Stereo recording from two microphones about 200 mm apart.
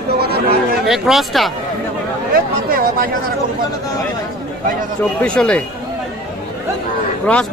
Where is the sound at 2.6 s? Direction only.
45° right (ahead or behind).